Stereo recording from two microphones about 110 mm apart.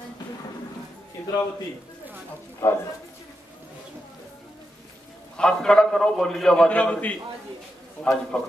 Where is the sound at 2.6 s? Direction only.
25° left (ahead or behind).